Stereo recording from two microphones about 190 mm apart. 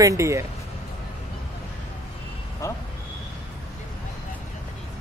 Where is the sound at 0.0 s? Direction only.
15° right (ahead or behind).